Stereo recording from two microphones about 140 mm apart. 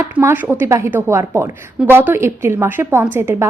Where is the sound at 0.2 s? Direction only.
15° right (ahead or behind).